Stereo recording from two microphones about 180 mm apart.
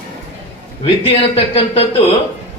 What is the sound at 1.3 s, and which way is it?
Speech, 35° left (ahead or behind).